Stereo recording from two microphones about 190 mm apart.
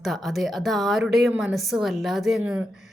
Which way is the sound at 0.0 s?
Centre (ahead or behind).